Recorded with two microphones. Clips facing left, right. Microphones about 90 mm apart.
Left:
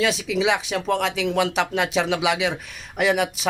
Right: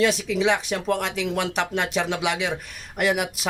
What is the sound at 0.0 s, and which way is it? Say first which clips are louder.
Speech: even; centre (ahead or behind).